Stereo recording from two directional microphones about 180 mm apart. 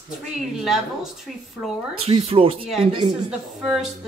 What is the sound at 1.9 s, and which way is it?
Speech, 30° right (ahead or behind).